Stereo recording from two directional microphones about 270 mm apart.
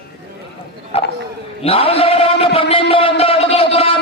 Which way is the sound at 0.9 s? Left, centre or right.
Left.